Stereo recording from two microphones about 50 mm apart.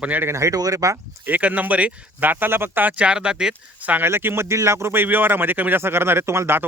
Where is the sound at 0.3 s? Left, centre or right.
Right.